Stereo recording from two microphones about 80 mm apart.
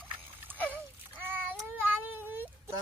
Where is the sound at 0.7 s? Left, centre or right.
Right.